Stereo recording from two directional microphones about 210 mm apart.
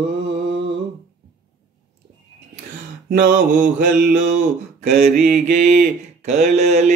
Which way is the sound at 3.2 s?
40° right (ahead or behind).